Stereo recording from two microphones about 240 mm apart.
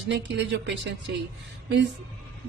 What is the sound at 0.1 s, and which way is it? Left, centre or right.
Speech, right.